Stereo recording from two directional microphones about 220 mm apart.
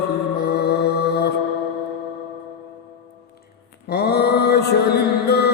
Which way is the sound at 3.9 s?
45° left (ahead or behind).